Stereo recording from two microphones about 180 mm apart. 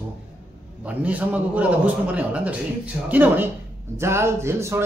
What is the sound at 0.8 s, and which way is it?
A man's voice, 10° right (ahead or behind).